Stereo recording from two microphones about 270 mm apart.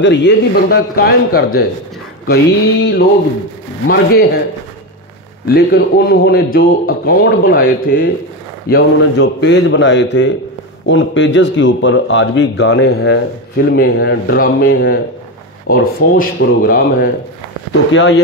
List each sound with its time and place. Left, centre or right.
0.0 s speech: left
5.5 s speech: left